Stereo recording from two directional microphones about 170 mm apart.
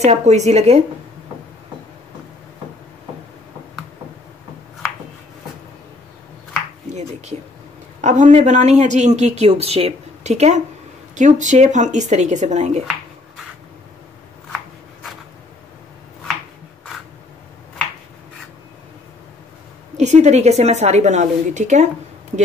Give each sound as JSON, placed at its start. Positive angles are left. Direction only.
{"t": 0.0, "sound": "a woman's voice", "side_deg": -40}
{"t": 6.9, "sound": "a sound", "side_deg": -40}
{"t": 8.0, "sound": "speech", "side_deg": -45}
{"t": 20.0, "sound": "a woman's voice", "side_deg": -40}